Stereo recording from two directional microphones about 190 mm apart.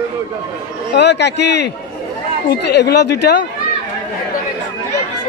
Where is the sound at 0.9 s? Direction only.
65° left (ahead or behind).